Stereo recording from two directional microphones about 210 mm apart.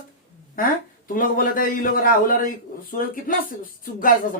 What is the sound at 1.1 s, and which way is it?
Speech, 40° left (ahead or behind).